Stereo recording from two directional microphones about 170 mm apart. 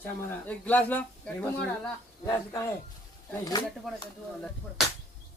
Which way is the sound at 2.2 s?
20° left (ahead or behind).